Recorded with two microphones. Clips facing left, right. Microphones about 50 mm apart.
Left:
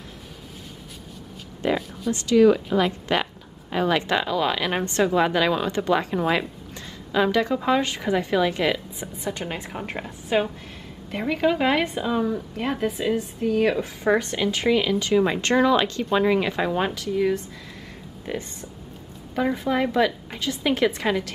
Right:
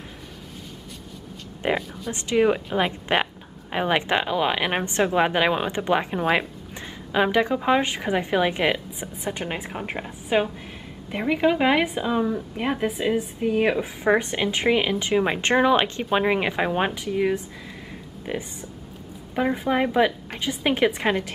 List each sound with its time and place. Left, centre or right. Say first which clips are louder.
1.6 s a woman's voice: left 1 dB; right
6.1 s a woman's voice: even; centre